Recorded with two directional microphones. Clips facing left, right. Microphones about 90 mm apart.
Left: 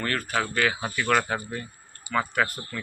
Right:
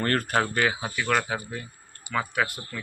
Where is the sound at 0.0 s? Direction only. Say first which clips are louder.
Right 3 dB; 45° right (ahead or behind).